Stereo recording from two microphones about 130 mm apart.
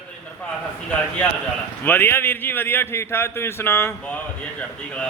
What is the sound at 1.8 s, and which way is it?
Speech, 15° left (ahead or behind).